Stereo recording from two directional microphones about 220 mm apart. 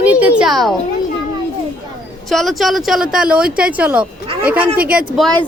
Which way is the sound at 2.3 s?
Centre (ahead or behind).